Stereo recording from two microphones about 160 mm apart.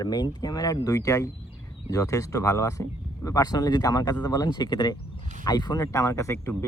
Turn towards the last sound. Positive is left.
turn(degrees=15)  # may be behind; listen again after turning